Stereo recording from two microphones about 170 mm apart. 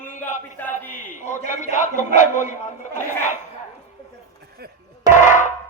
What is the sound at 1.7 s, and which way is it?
Speech, 45° left (ahead or behind).